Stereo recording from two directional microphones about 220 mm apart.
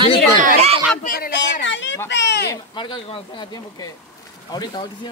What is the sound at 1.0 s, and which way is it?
Speech, 45° left (ahead or behind).